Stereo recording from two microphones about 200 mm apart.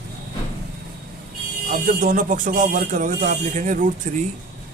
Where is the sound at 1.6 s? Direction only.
40° right (ahead or behind).